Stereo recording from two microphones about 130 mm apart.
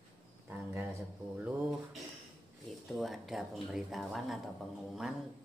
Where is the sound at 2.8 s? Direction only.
Centre (ahead or behind).